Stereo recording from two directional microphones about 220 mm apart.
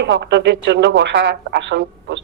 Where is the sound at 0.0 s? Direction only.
50° right (ahead or behind).